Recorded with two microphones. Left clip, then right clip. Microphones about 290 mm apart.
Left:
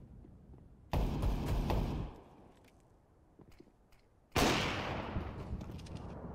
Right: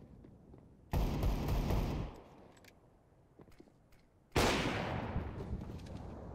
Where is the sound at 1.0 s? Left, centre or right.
Centre.